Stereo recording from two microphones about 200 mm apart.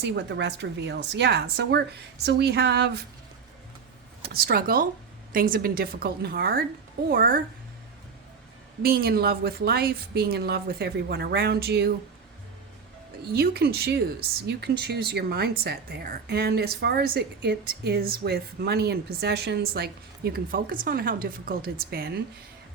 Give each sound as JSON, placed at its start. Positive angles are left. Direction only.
{"t": 0.0, "sound": "a woman's voice", "side_deg": -60}
{"t": 4.2, "sound": "speech", "side_deg": -50}
{"t": 8.8, "sound": "speech", "side_deg": -50}
{"t": 13.3, "sound": "speech", "side_deg": -50}